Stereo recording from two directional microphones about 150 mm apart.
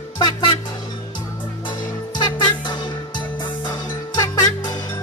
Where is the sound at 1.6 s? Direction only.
30° left (ahead or behind).